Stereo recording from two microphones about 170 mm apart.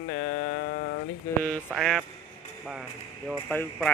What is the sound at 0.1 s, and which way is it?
Music, 55° left (ahead or behind).